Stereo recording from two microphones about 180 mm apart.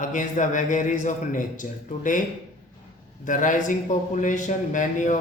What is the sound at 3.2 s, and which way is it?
A man's voice, 45° left (ahead or behind).